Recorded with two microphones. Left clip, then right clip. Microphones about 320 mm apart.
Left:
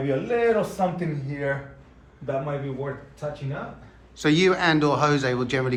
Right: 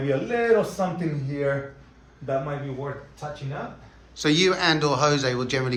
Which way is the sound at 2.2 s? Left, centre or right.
Centre.